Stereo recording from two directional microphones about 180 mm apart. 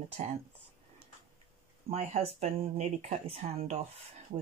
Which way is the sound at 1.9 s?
35° right (ahead or behind).